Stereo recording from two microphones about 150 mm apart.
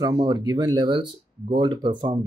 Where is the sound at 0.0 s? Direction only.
25° right (ahead or behind).